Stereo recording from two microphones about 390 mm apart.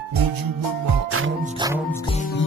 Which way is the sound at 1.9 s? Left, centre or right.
Centre.